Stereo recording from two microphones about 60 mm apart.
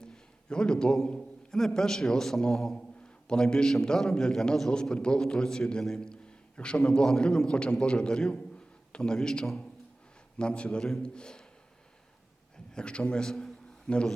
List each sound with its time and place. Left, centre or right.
0.0 s a sound: centre
1.0 s a man's voice: centre
12.7 s a man's voice: centre